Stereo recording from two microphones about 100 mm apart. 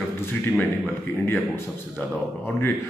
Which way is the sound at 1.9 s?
20° left (ahead or behind).